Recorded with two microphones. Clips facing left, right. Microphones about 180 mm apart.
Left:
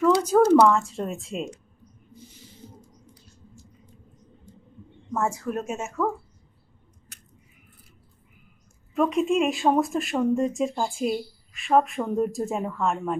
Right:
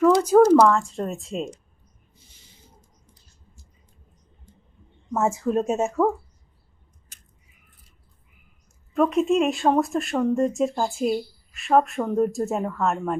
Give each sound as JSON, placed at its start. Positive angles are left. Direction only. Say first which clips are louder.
{"t": 0.0, "sound": "speech", "louder": "right 3 dB", "side_deg": -5}
{"t": 5.1, "sound": "speech", "louder": "right 5 dB", "side_deg": -20}
{"t": 9.0, "sound": "speech", "louder": "right 2 dB", "side_deg": 0}